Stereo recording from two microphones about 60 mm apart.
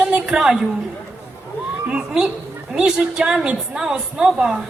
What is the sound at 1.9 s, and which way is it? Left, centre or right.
A woman's voice, centre.